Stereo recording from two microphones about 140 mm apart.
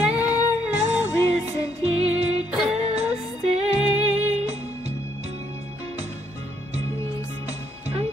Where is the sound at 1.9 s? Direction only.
50° right (ahead or behind).